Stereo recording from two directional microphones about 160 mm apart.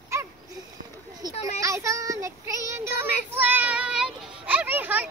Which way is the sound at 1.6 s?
20° right (ahead or behind).